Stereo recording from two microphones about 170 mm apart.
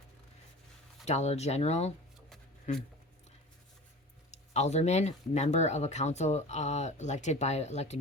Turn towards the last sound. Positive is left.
turn(degrees=40)  # may be behind; listen again after turning